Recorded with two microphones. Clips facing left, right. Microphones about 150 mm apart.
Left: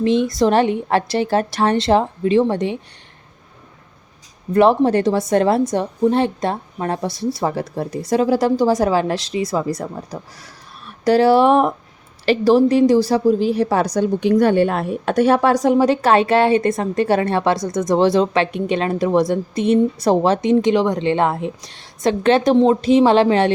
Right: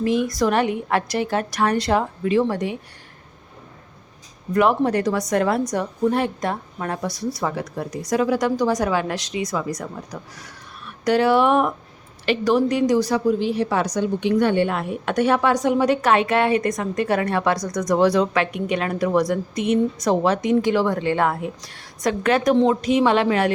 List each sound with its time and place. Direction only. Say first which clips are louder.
0.0 s a woman's voice: left 4 dB; 25° left (ahead or behind)
4.5 s a woman's voice: left 5 dB; 30° left (ahead or behind)